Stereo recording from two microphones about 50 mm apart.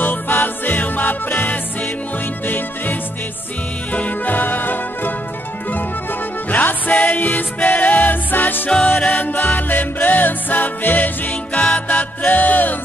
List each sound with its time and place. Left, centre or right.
0.0 s music: left
6.5 s music: left
8.6 s music: left
9.0 s music: left
11.5 s music: left